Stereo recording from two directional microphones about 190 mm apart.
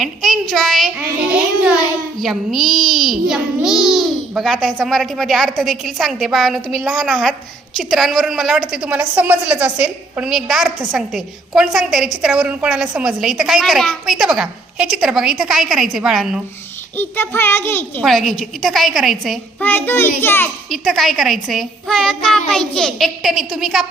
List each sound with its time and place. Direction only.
0.0 s a child's voice: centre (ahead or behind)
17.0 s a child's voice: 10° left (ahead or behind)
18.0 s a woman's voice: centre (ahead or behind)
20.7 s a woman's voice: centre (ahead or behind)